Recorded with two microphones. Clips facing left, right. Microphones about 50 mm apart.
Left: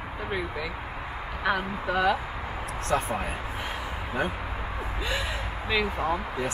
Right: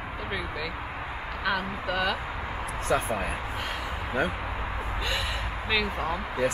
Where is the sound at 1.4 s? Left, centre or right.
Centre.